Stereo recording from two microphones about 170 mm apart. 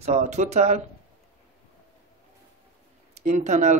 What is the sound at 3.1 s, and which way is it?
Speech, 45° right (ahead or behind).